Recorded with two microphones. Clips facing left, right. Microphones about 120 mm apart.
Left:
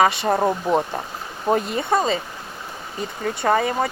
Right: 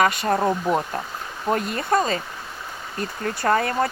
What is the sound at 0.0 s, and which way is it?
Speech, 30° left (ahead or behind).